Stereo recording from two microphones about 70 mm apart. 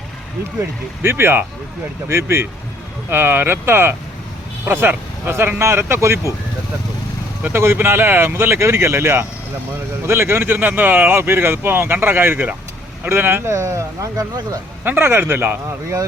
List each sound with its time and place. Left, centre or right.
1.1 s speech: right
2.0 s speech: right
7.4 s speech: right
14.8 s speech: right